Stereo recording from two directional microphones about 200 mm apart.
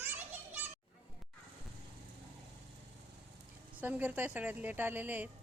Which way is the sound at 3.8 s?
10° right (ahead or behind).